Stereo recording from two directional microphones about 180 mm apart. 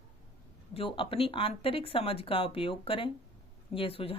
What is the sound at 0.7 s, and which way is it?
Speech, 30° left (ahead or behind).